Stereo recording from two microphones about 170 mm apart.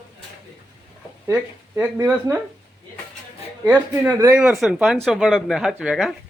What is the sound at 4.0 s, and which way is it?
Speech, 10° right (ahead or behind).